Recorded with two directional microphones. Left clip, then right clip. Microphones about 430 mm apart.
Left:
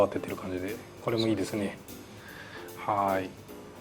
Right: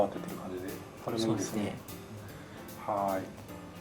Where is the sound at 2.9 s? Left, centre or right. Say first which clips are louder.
Left 4 dB; left.